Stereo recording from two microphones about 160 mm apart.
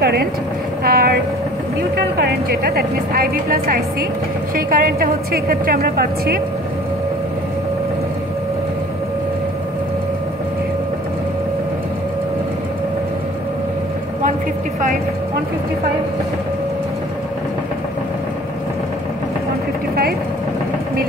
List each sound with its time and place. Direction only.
0.0 s speech: 80° right
0.8 s speech: 70° right (ahead or behind)
2.0 s speech: 80° right